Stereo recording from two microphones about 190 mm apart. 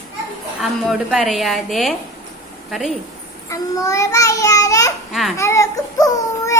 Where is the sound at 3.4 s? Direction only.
15° left (ahead or behind).